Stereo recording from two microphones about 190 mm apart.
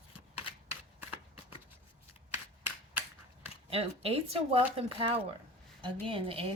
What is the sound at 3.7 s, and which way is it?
A woman's voice, 30° right (ahead or behind).